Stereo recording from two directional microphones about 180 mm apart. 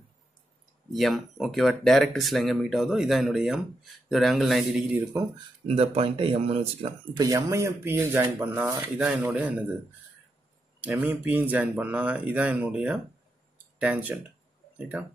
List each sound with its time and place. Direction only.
0.9 s speech: centre (ahead or behind)
5.7 s speech: 35° right (ahead or behind)
7.2 s speech: 20° right (ahead or behind)
10.8 s speech: 10° right (ahead or behind)